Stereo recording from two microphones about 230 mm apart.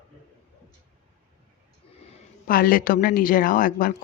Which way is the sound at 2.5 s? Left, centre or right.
Left.